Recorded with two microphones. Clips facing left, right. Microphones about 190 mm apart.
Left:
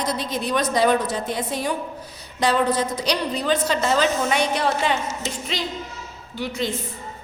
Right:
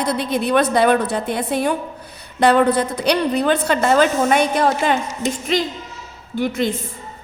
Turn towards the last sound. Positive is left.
turn(degrees=-50)  # may be behind; listen again after turning